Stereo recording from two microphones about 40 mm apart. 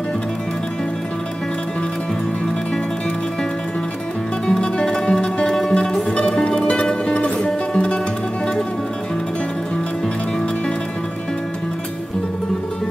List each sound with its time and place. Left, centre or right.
4.5 s music: left